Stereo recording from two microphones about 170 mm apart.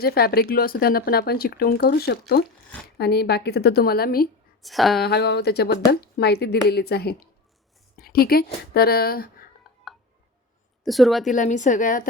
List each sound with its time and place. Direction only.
0.0 s a woman's voice: 65° left (ahead or behind)
4.6 s speech: centre (ahead or behind)
5.0 s a woman's voice: 75° left (ahead or behind)
7.9 s a woman's voice: 60° left (ahead or behind)
10.8 s speech: centre (ahead or behind)
11.3 s a woman's voice: 45° left (ahead or behind)